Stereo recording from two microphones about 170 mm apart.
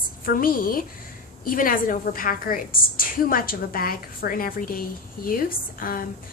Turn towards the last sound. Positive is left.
turn(degrees=55)  # may be behind; listen again after turning